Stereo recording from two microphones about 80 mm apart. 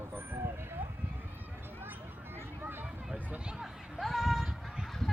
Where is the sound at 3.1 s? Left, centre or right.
Centre.